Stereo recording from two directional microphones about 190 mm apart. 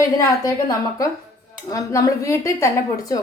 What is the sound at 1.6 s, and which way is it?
A woman's voice, 15° left (ahead or behind).